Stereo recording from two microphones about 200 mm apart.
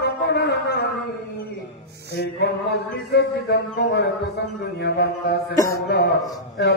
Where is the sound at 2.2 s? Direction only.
55° left (ahead or behind).